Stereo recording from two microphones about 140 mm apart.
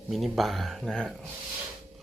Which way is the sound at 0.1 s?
Centre (ahead or behind).